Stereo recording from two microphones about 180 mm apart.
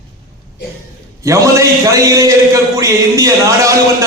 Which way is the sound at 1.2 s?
20° right (ahead or behind).